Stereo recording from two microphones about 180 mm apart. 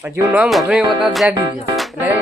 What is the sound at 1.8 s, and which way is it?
Music, 5° right (ahead or behind).